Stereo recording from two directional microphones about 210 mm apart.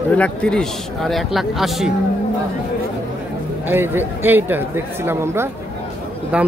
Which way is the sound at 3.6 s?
10° right (ahead or behind).